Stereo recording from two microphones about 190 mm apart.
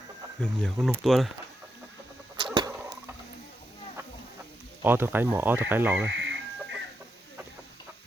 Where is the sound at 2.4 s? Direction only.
20° right (ahead or behind).